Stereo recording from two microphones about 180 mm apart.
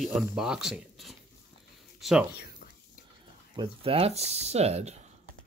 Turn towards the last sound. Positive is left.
turn(degrees=-35)  # may be behind; listen again after turning